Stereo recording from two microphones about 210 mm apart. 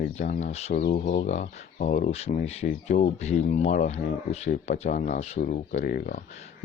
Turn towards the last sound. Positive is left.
turn(degrees=45)  # may be behind; listen again after turning